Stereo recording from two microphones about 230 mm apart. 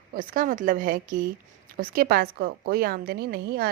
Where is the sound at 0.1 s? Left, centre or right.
Right.